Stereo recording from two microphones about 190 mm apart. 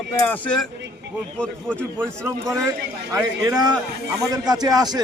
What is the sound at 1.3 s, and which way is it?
Speech, 5° left (ahead or behind).